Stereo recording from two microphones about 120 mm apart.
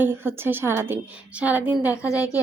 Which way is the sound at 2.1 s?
25° left (ahead or behind).